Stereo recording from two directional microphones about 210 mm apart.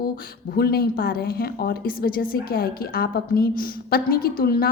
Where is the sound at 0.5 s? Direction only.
45° left (ahead or behind).